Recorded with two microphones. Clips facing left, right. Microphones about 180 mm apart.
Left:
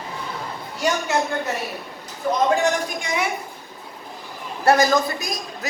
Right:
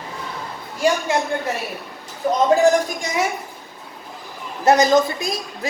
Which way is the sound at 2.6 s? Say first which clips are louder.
Right 6 dB; 40° right (ahead or behind).